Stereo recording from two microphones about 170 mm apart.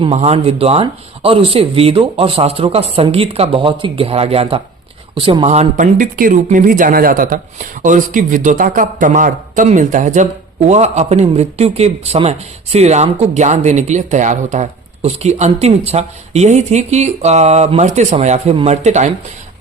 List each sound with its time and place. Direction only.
0.0 s a man's voice: 35° right (ahead or behind)